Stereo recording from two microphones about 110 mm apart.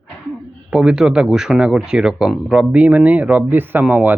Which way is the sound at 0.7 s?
5° right (ahead or behind).